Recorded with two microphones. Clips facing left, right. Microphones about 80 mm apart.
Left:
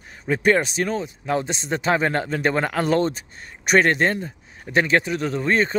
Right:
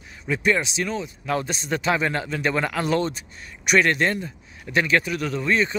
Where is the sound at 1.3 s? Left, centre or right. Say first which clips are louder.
Left 1 dB; left.